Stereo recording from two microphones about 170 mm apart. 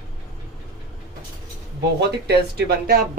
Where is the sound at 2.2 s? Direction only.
70° right (ahead or behind).